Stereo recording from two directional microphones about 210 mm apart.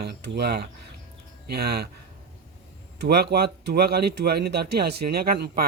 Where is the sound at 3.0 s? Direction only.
50° right (ahead or behind).